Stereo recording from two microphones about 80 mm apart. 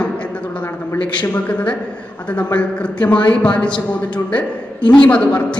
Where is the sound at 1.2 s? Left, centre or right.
Centre.